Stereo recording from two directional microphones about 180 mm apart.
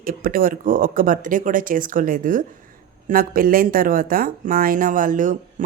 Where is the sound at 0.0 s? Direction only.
55° right (ahead or behind).